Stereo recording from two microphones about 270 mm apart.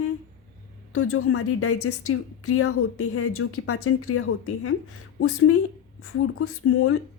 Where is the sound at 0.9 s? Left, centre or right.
Left.